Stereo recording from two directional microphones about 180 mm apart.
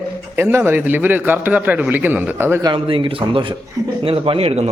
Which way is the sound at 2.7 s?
30° right (ahead or behind).